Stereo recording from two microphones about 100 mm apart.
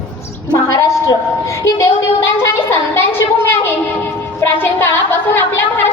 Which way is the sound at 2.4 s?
25° left (ahead or behind).